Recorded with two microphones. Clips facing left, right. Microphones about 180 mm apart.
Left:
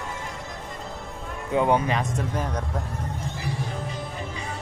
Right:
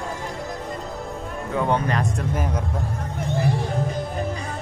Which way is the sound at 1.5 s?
10° left (ahead or behind).